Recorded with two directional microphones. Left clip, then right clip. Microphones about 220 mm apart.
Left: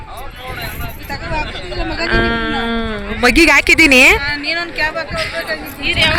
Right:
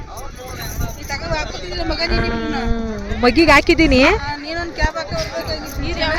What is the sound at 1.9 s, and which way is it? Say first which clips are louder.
Speech: left 5 dB; centre (ahead or behind).